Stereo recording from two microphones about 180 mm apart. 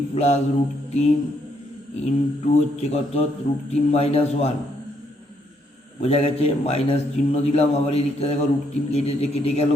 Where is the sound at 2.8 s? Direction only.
35° left (ahead or behind).